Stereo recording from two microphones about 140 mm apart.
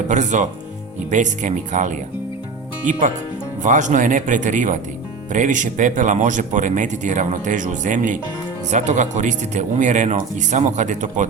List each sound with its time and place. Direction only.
0.1 s speech: 60° right (ahead or behind)
3.6 s speech: 60° right (ahead or behind)